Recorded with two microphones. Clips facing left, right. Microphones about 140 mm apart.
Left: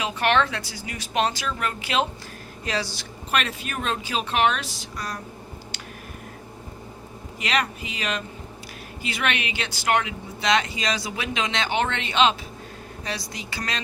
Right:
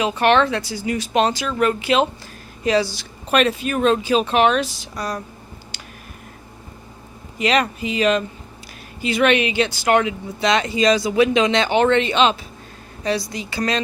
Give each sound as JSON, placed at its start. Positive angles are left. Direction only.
{"t": 0.0, "sound": "speech", "side_deg": -30}
{"t": 3.3, "sound": "speech", "side_deg": -25}
{"t": 7.3, "sound": "speech", "side_deg": -25}
{"t": 13.1, "sound": "speech", "side_deg": -30}